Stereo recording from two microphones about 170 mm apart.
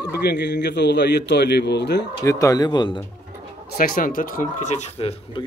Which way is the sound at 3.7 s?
55° left (ahead or behind).